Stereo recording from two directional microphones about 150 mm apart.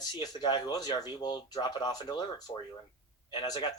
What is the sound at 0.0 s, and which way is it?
Speech, 25° left (ahead or behind).